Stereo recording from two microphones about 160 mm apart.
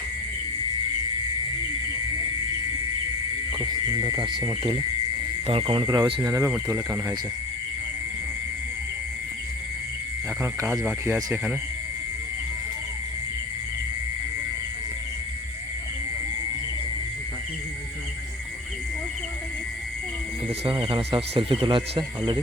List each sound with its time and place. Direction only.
3.5 s speech: 25° right (ahead or behind)
6.3 s speech: 15° right (ahead or behind)
11.0 s speech: 15° right (ahead or behind)
20.7 s speech: 30° right (ahead or behind)